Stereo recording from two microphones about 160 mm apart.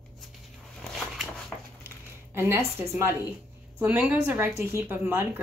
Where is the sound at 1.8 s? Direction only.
15° right (ahead or behind).